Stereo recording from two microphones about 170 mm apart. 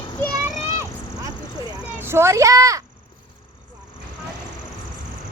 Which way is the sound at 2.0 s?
15° right (ahead or behind).